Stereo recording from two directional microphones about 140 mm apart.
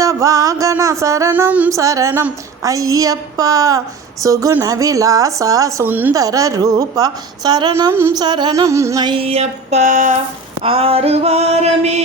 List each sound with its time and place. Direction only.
0.0 s a sound: 25° right (ahead or behind)
1.7 s a woman's voice: 25° right (ahead or behind)
6.1 s a woman's voice: 25° right (ahead or behind)
9.1 s male singing: 45° right (ahead or behind); by 10.2 s 65° right (ahead or behind)
10.6 s male singing: 40° right (ahead or behind)